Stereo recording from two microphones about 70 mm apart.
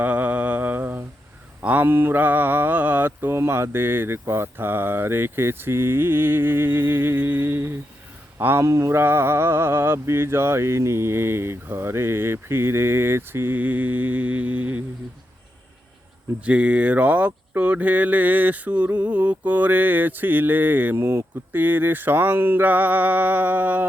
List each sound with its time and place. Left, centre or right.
0.0 s mantra: right
1.6 s a sound: right
1.9 s mantra: right
2.1 s mantra: right
8.4 s speech: right
8.6 s mantra: right
13.6 s speech: right
16.4 s speech: centre
22.6 s speech: right